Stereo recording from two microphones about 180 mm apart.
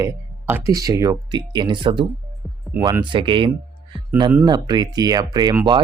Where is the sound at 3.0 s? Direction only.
25° right (ahead or behind).